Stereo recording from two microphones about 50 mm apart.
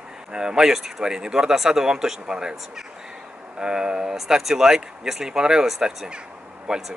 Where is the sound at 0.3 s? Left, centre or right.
Centre.